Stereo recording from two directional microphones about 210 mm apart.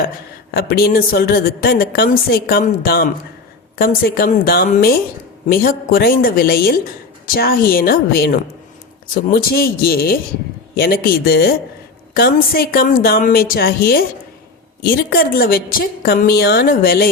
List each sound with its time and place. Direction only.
0.5 s a woman's voice: 45° left (ahead or behind)